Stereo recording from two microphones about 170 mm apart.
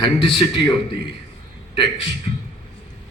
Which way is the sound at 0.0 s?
30° left (ahead or behind).